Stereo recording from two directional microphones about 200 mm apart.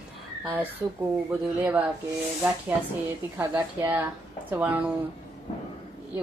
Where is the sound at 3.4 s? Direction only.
10° right (ahead or behind).